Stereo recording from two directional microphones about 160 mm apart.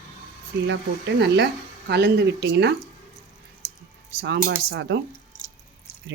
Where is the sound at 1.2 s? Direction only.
90° right.